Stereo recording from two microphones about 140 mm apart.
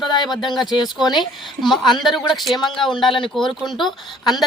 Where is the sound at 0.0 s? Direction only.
Centre (ahead or behind).